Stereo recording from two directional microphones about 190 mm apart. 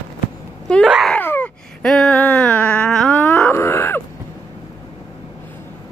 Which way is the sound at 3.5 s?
15° left (ahead or behind).